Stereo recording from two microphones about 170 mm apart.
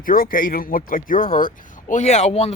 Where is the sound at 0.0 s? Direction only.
55° left (ahead or behind).